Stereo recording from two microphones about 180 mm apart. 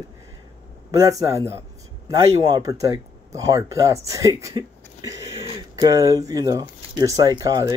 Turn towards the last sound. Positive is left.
turn(degrees=-20)  # may be behind; listen again after turning